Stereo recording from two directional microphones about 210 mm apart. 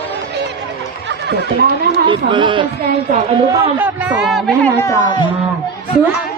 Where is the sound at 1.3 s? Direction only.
50° right (ahead or behind).